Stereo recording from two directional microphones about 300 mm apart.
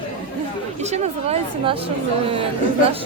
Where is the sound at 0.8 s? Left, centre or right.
Right.